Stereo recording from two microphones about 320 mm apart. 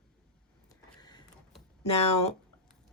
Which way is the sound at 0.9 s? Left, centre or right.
Centre.